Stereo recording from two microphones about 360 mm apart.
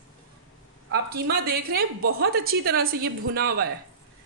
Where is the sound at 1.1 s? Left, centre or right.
Right.